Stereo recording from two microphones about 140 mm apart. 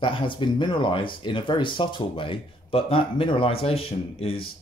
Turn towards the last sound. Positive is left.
turn(degrees=45)  # may be behind; listen again after turning